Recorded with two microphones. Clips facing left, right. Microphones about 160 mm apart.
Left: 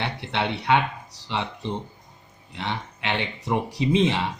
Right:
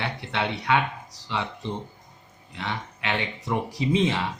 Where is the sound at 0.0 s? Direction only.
25° left (ahead or behind).